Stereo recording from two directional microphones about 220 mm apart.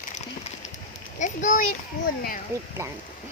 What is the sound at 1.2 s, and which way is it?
Speech, 35° left (ahead or behind).